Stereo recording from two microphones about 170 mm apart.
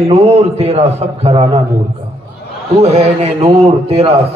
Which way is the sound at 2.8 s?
40° right (ahead or behind).